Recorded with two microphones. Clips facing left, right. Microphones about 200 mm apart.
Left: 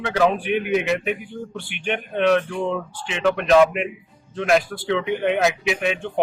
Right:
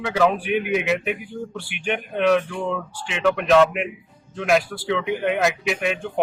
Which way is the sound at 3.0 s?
Centre (ahead or behind).